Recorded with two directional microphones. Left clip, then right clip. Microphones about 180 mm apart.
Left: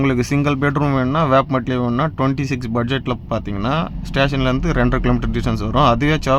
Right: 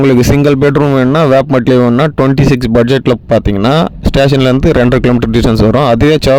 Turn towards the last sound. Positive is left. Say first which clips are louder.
# right 8 dB
turn(degrees=-45)  # may be behind; listen again after turning